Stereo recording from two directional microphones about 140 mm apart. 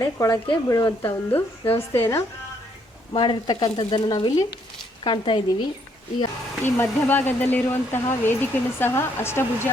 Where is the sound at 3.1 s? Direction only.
35° left (ahead or behind).